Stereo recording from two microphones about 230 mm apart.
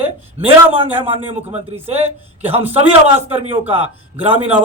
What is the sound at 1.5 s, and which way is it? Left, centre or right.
Speech, right.